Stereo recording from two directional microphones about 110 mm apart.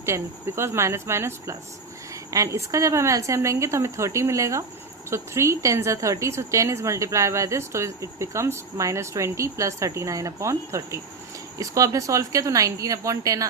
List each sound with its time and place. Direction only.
0.0 s a woman's voice: 25° right (ahead or behind)